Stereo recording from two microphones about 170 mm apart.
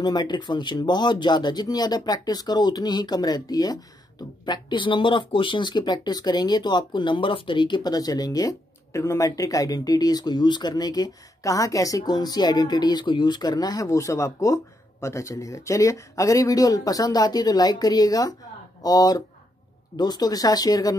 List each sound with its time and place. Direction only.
0.0 s speech: 25° left (ahead or behind)